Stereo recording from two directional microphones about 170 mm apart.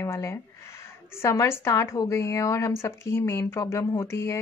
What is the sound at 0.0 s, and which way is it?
A woman's voice, 15° left (ahead or behind).